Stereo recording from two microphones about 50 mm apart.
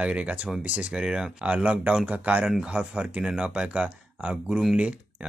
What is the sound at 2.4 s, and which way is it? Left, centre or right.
Speech, centre.